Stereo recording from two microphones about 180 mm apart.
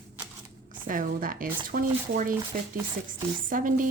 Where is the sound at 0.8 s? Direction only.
50° right (ahead or behind).